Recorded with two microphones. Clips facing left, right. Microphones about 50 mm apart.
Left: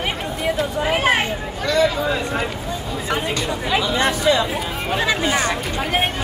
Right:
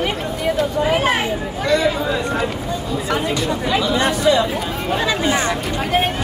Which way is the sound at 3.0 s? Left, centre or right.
Centre.